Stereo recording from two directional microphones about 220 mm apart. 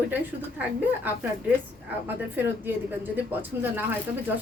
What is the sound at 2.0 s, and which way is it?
A woman's voice, 10° right (ahead or behind).